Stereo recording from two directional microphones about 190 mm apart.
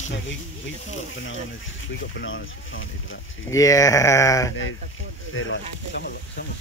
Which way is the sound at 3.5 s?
15° left (ahead or behind).